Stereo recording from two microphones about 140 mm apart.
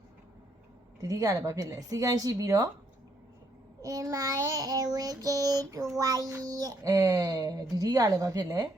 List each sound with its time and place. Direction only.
1.0 s speech: 25° right (ahead or behind)
3.8 s speech: 25° right (ahead or behind)